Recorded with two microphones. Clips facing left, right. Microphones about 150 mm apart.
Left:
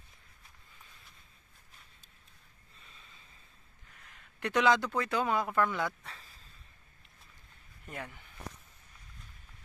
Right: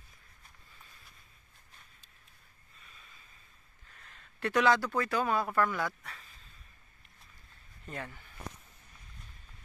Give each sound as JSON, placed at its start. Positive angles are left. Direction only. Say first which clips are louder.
{"t": 2.8, "sound": "snort", "louder": "even", "side_deg": 25}
{"t": 4.0, "sound": "a man's voice", "louder": "right 2 dB", "side_deg": 15}
{"t": 7.8, "sound": "speech", "louder": "right 1 dB", "side_deg": 15}